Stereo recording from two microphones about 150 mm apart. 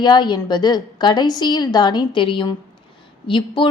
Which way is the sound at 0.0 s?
30° left (ahead or behind).